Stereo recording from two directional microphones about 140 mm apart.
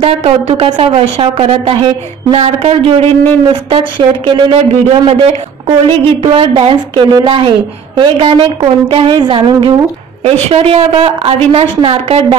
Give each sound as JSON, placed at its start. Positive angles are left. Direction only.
{"t": 0.0, "sound": "a woman's voice", "side_deg": -50}
{"t": 0.7, "sound": "a woman's voice", "side_deg": -35}